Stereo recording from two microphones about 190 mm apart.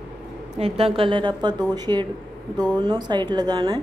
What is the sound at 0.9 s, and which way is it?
A woman's voice, 25° right (ahead or behind).